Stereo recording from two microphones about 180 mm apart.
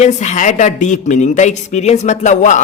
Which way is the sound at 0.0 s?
40° left (ahead or behind).